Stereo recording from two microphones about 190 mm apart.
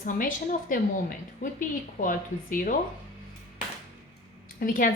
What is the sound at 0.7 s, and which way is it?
A woman's voice, 45° left (ahead or behind).